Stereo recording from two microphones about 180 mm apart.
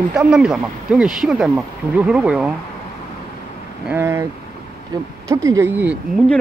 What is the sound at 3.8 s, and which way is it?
Speech, 15° right (ahead or behind).